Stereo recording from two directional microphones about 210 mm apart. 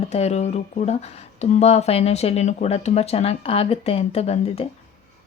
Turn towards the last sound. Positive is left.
turn(degrees=30)  # may be behind; listen again after turning